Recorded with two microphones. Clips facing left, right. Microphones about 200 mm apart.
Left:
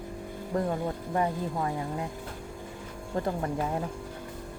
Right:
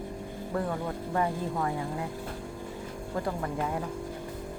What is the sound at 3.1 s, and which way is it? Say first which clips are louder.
Speech: left 2 dB; 30° left (ahead or behind).